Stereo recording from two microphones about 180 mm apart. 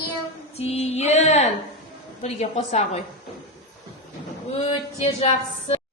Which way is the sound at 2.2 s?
35° left (ahead or behind).